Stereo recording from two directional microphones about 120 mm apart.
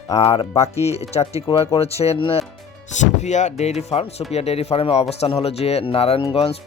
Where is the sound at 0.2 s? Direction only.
55° left (ahead or behind).